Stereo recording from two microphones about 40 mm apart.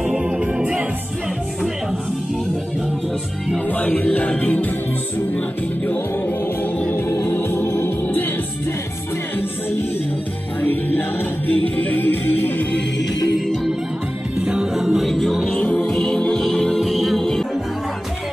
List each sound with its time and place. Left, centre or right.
0.0 s music: centre
3.6 s music: left
6.6 s music: left
7.0 s music: left
10.6 s music: left
14.3 s music: right
15.0 s music: centre